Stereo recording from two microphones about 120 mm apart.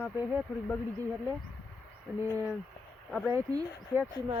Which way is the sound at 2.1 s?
10° right (ahead or behind).